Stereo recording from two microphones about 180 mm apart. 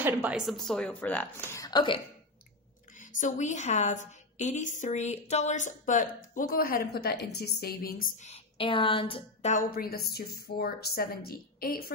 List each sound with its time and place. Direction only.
0.0 s a woman's voice: 5° right (ahead or behind); by 2.0 s 25° left (ahead or behind)
3.0 s a woman's voice: 45° left (ahead or behind)
8.3 s a woman's voice: 30° left (ahead or behind); by 11.9 s 55° left (ahead or behind)